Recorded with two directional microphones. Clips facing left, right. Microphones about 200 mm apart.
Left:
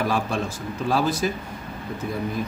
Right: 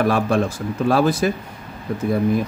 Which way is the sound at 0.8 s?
60° right (ahead or behind).